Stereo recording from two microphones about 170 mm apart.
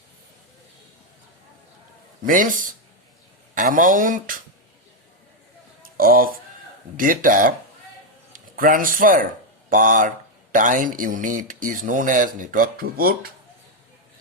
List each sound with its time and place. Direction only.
2.2 s speech: 50° right (ahead or behind)
6.0 s speech: 55° right (ahead or behind)